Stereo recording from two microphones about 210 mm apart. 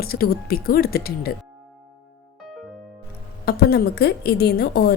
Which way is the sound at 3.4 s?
50° left (ahead or behind).